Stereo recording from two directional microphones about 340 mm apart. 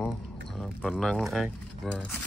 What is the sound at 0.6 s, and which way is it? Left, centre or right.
Speech, centre.